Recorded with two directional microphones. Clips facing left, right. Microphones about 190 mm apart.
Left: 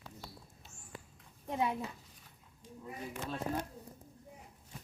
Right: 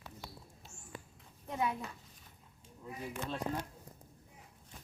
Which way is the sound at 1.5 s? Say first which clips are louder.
Left 2 dB; 25° left (ahead or behind).